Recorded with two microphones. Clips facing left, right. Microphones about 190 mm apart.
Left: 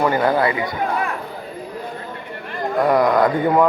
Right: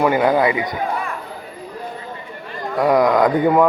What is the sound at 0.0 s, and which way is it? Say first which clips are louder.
Speech: right 2 dB; 15° right (ahead or behind).